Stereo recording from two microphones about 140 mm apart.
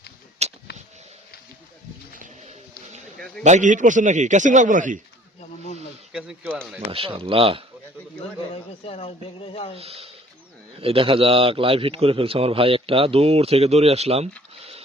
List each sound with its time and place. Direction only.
0.4 s a sound: 50° right (ahead or behind)
3.2 s a man's voice: 5° left (ahead or behind)
3.4 s a man's voice: 60° right (ahead or behind)
6.1 s speech: 10° right (ahead or behind)
6.9 s speech: 40° right (ahead or behind)
8.2 s a man's voice: 45° left (ahead or behind)
9.7 s a man's voice: 45° right (ahead or behind)